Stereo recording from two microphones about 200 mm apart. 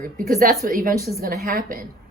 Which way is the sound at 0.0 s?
45° right (ahead or behind).